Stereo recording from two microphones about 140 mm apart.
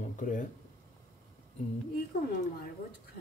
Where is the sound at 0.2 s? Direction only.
65° left (ahead or behind).